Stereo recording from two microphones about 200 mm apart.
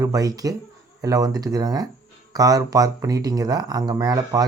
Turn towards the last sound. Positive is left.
turn(degrees=-20)  # may be behind; listen again after turning